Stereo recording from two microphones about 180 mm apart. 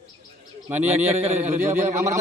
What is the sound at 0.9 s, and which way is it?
A man's voice, 35° right (ahead or behind).